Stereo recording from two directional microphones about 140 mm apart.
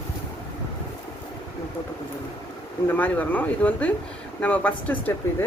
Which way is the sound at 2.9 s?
10° left (ahead or behind).